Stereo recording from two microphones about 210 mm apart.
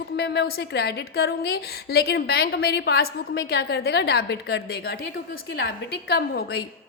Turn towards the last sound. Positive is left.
turn(degrees=50)  # may be behind; listen again after turning